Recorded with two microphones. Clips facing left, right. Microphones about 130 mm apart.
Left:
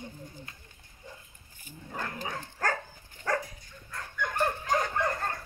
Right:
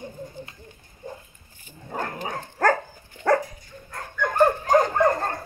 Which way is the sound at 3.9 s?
50° right (ahead or behind).